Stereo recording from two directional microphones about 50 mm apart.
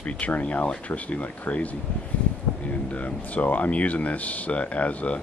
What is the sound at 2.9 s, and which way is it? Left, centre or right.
Speech, left.